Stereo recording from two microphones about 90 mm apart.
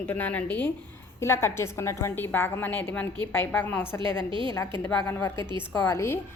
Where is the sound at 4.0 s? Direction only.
65° right (ahead or behind).